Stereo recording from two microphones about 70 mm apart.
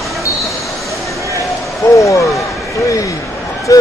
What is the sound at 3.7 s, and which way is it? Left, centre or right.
Vehicle, left.